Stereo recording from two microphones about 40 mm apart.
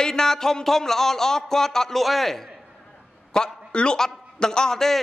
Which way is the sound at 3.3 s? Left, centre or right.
Left.